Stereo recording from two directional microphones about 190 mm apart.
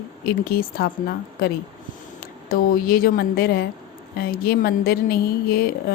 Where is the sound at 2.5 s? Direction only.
50° left (ahead or behind).